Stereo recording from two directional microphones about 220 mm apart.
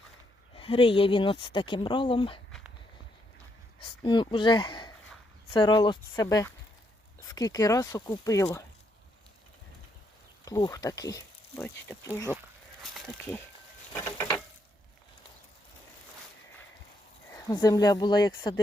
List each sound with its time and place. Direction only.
0.5 s speech: 25° left (ahead or behind)
3.8 s speech: 20° left (ahead or behind)
10.4 s speech: 15° left (ahead or behind)
12.8 s speech: centre (ahead or behind)
13.9 s a sound: 10° left (ahead or behind)
17.3 s speech: 15° left (ahead or behind)